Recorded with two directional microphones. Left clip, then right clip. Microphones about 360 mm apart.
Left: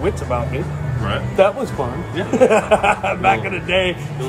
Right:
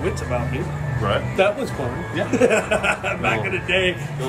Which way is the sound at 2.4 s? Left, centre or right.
Centre.